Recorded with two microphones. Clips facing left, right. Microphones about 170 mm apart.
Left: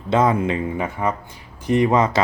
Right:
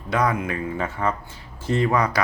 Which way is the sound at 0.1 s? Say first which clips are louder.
Left 5 dB; 25° left (ahead or behind).